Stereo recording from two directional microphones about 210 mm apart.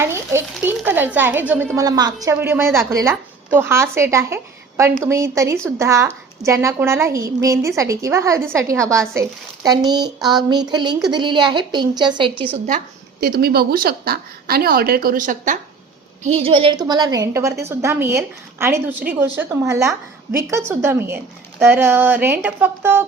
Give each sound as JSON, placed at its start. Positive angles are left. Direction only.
{"t": 0.0, "sound": "a woman's voice", "side_deg": -10}
{"t": 12.6, "sound": "speech", "side_deg": -40}
{"t": 16.2, "sound": "speech", "side_deg": -30}